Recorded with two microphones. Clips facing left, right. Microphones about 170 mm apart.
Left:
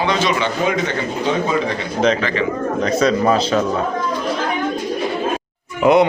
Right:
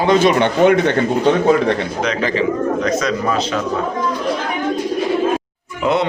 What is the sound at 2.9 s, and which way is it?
Speech, 30° left (ahead or behind).